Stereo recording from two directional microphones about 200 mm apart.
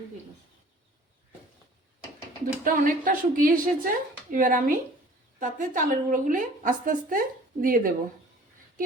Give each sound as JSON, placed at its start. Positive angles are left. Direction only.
{"t": 2.6, "sound": "a woman's voice", "side_deg": -45}